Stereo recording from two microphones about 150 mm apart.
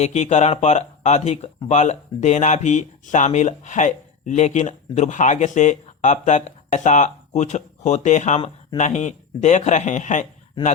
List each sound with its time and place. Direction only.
0.0 s speech: 50° left (ahead or behind)